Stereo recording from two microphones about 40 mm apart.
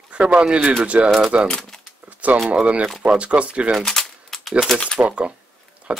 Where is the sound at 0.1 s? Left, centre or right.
Right.